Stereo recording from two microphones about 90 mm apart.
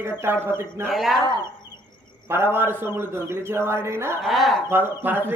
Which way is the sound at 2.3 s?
25° right (ahead or behind).